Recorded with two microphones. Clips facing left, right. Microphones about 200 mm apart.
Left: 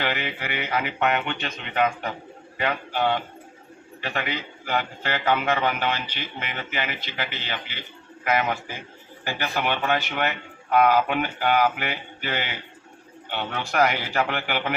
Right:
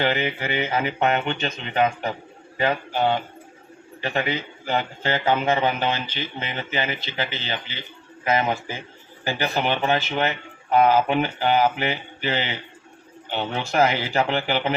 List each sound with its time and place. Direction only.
0.0 s speech: 25° right (ahead or behind)
8.2 s speech: 25° right (ahead or behind)